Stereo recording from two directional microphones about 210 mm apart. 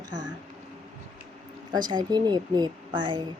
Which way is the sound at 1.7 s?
20° right (ahead or behind).